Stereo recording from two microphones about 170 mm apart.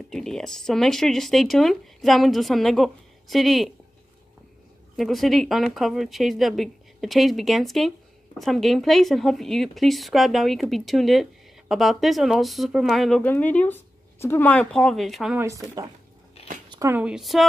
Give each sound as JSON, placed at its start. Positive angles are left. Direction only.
{"t": 0.1, "sound": "speech", "side_deg": 0}
{"t": 4.9, "sound": "speech", "side_deg": 0}
{"t": 15.3, "sound": "speech", "side_deg": -20}
{"t": 16.6, "sound": "a sound", "side_deg": -25}
{"t": 16.9, "sound": "speech", "side_deg": -5}